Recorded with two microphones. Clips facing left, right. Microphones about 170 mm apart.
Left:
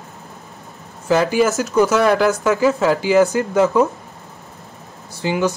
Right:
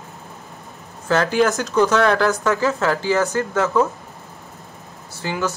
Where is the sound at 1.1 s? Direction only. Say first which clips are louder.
Left 2 dB; 10° left (ahead or behind).